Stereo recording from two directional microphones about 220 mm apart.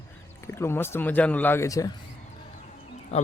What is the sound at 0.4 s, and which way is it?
Speech, 10° left (ahead or behind).